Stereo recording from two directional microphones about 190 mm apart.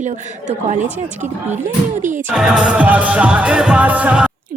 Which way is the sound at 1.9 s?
40° right (ahead or behind).